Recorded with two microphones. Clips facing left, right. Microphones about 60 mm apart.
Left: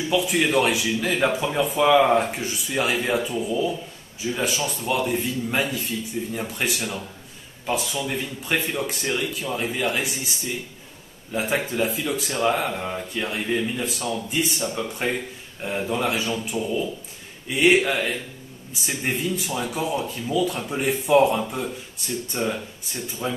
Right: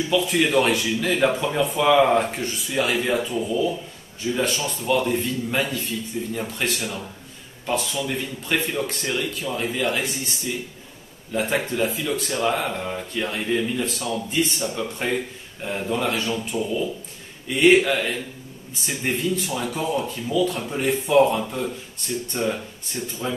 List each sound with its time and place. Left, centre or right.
0.1 s speech: centre
11.3 s speech: centre